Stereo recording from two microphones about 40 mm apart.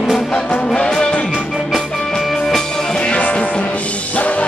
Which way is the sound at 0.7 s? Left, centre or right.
Left.